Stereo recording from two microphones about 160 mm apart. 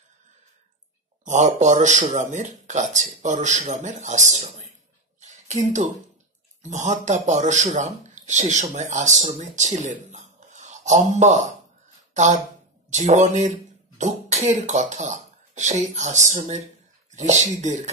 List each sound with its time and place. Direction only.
1.2 s speech: 50° right (ahead or behind)
5.2 s a sound: 45° right (ahead or behind)
6.6 s speech: 50° right (ahead or behind)
12.9 s speech: 50° right (ahead or behind)